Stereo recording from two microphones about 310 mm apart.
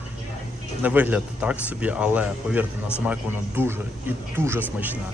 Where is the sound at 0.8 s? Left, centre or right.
Centre.